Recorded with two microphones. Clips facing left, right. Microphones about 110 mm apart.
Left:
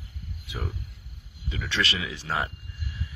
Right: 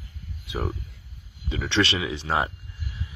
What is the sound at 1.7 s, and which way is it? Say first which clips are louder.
Speech: right 5 dB; 30° right (ahead or behind).